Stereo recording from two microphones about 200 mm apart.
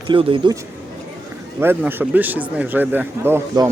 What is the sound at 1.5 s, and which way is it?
A man's voice, 10° right (ahead or behind).